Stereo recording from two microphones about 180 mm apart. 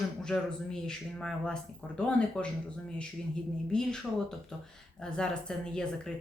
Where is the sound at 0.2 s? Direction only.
5° left (ahead or behind).